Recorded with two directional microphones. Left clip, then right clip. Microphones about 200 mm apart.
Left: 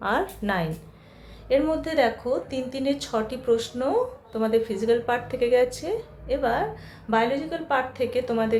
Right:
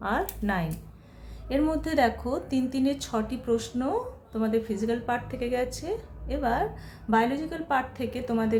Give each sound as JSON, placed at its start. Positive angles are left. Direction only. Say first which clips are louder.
{"t": 0.0, "sound": "a woman's voice", "louder": "left 4 dB", "side_deg": -5}
{"t": 1.5, "sound": "a woman's voice", "louder": "left 4 dB", "side_deg": -20}